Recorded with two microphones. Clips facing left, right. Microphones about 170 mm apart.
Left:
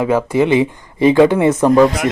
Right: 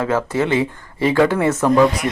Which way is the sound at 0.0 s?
15° left (ahead or behind).